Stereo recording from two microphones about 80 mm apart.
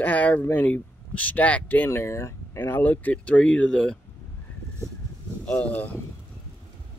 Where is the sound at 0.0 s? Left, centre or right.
Centre.